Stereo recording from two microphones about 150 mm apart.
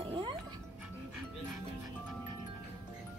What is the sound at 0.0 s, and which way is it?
Music, 35° right (ahead or behind).